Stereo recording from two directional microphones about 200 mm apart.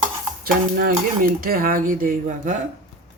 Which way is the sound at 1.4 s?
45° right (ahead or behind).